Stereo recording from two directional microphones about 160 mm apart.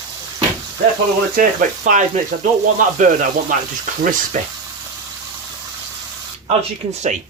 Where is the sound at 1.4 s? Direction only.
50° right (ahead or behind).